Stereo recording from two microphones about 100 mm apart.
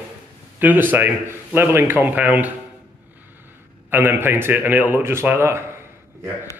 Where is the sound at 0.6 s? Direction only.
20° right (ahead or behind).